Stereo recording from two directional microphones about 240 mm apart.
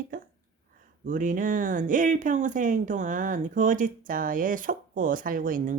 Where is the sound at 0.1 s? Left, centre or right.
Right.